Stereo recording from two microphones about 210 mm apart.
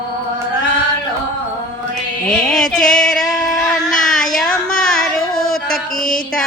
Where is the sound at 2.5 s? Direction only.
5° left (ahead or behind).